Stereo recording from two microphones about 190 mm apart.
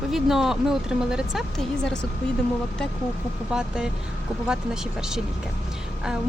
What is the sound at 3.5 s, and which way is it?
Speech, 5° right (ahead or behind).